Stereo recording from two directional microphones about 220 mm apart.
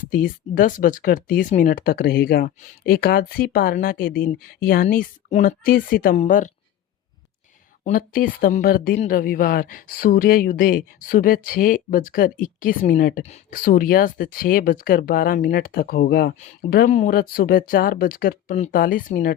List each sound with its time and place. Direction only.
0.0 s speech: 40° left (ahead or behind)
7.9 s speech: 40° left (ahead or behind)